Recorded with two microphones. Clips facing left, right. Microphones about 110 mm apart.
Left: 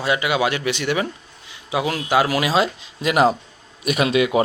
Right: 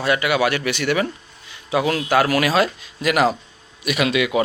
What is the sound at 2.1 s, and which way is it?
Speech, 15° left (ahead or behind).